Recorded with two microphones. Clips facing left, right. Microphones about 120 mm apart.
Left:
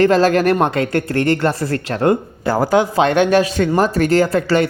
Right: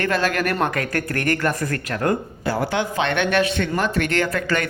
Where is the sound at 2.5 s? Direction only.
40° left (ahead or behind).